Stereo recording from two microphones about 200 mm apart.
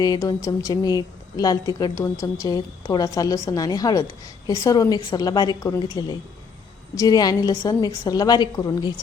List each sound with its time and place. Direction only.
0.0 s a woman's voice: 20° left (ahead or behind)
6.9 s a woman's voice: 20° left (ahead or behind)